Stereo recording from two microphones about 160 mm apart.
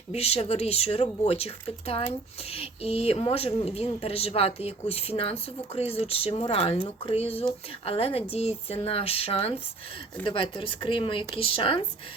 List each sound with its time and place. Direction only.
0.1 s speech: 40° left (ahead or behind)